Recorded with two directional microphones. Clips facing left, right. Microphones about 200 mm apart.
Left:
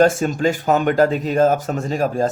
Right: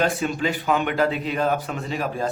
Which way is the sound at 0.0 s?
45° left (ahead or behind).